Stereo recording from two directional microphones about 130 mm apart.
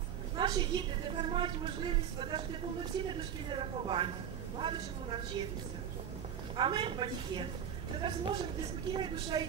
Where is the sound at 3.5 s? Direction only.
40° right (ahead or behind).